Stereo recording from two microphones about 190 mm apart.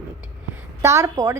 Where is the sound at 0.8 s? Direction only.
15° right (ahead or behind).